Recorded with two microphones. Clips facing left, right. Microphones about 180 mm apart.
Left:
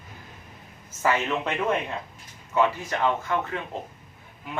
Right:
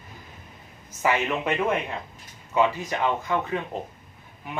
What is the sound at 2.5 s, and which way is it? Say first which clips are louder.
A man's voice: right 1 dB; 15° right (ahead or behind).